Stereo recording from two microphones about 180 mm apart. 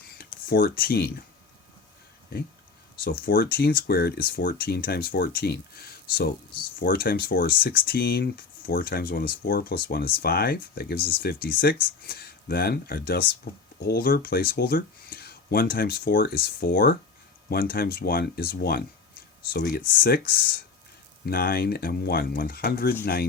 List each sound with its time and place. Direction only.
0.2 s speech: 55° left (ahead or behind)
3.0 s speech: 55° left (ahead or behind)